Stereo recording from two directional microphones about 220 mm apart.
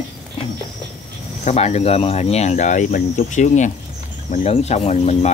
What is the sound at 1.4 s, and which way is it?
Speech, 30° left (ahead or behind).